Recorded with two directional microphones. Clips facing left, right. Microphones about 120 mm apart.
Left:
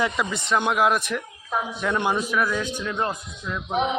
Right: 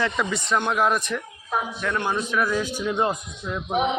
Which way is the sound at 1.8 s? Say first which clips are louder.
Left 4 dB; 15° left (ahead or behind).